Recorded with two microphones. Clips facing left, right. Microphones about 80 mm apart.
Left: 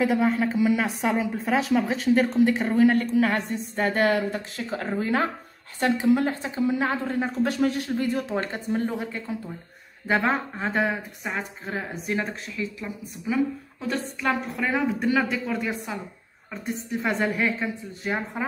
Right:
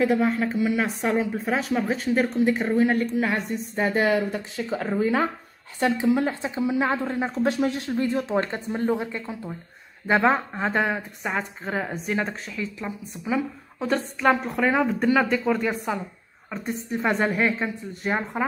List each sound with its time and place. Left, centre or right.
0.0 s a woman's voice: centre; by 11.1 s right
11.6 s a woman's voice: right
12.5 s speech: centre
12.8 s a woman's voice: right
13.8 s a woman's voice: right
15.0 s speech: centre
16.6 s a woman's voice: right
17.4 s speech: centre